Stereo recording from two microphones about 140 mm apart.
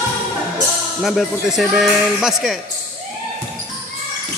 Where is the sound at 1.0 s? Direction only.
Centre (ahead or behind).